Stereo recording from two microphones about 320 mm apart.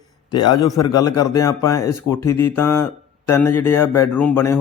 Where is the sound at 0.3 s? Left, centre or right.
Centre.